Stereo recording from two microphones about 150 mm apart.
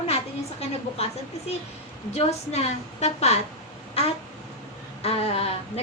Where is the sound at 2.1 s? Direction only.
45° left (ahead or behind).